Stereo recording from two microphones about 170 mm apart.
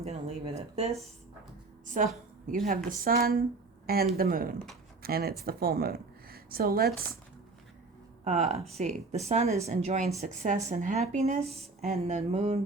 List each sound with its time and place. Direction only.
0.0 s a woman's voice: 40° right (ahead or behind)
2.5 s a woman's voice: 55° right (ahead or behind)
8.2 s a woman's voice: 40° right (ahead or behind)